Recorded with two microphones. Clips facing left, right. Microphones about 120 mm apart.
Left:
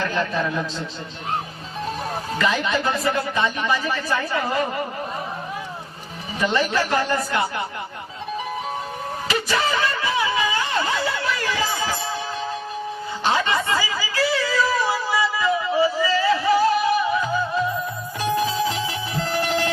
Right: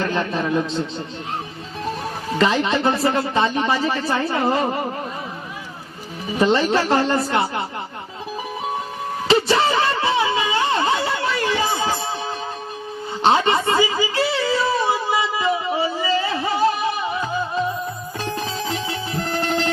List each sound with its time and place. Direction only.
0.0 s speech: 25° right (ahead or behind)
2.4 s speech: 30° right (ahead or behind)
6.4 s speech: 30° right (ahead or behind)
9.2 s a sound: 30° right (ahead or behind)
13.2 s speech: 25° right (ahead or behind)
15.1 s a sound: 25° right (ahead or behind)
18.2 s music: 15° left (ahead or behind)